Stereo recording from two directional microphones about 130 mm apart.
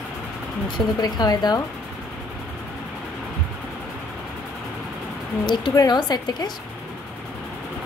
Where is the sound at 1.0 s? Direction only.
30° left (ahead or behind).